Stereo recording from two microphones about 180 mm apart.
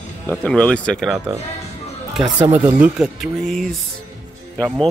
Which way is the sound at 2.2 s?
25° right (ahead or behind).